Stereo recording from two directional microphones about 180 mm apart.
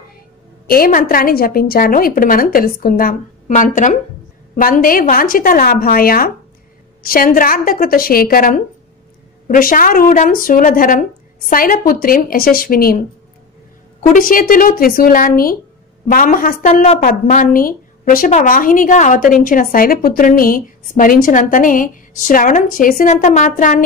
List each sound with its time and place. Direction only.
0.7 s a woman's voice: 55° left (ahead or behind)
14.1 s a woman's voice: 50° left (ahead or behind)